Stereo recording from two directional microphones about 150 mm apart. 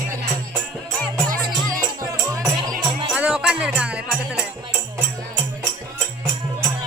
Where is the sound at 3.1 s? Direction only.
5° right (ahead or behind).